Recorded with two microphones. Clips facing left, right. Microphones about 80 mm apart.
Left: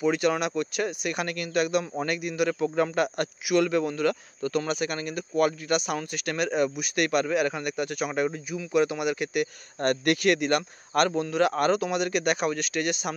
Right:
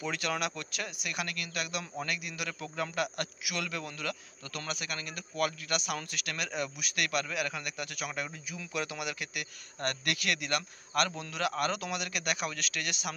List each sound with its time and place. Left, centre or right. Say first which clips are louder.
0.0 s a man's voice: left 9 dB; left